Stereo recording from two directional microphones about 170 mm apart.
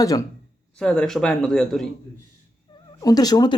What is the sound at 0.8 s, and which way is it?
Speech, 5° left (ahead or behind).